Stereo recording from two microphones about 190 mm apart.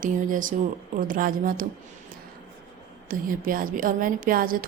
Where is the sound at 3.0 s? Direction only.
45° right (ahead or behind).